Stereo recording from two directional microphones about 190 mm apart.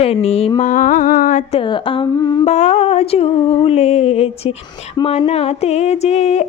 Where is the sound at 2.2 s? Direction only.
20° left (ahead or behind).